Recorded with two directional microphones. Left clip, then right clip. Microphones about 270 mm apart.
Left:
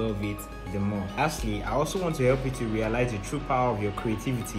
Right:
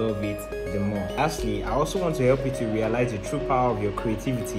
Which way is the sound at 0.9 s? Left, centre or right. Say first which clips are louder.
Right 2 dB; centre.